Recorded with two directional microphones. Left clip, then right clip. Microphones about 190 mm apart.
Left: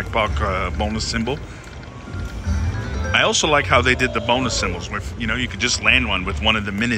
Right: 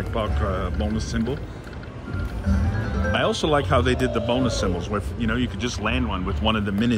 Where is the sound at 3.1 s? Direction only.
10° right (ahead or behind).